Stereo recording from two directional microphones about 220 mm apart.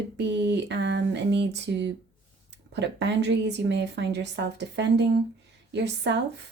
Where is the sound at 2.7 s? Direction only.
50° right (ahead or behind).